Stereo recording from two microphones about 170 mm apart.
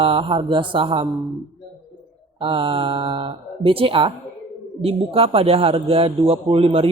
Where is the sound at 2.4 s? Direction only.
30° right (ahead or behind).